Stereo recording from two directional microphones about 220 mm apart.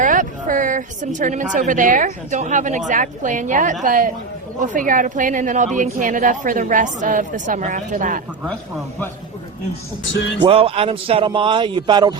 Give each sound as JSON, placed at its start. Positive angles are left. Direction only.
{"t": 0.0, "sound": "a woman's voice", "side_deg": -35}
{"t": 10.4, "sound": "a man's voice", "side_deg": -25}